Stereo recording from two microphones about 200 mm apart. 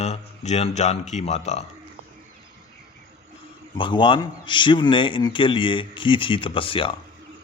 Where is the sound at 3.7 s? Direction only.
25° left (ahead or behind).